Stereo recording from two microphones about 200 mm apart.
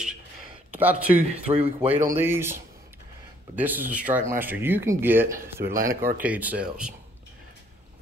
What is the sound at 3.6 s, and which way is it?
Speech, 10° right (ahead or behind).